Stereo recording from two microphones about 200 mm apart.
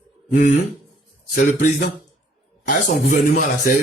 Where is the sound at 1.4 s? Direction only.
40° left (ahead or behind).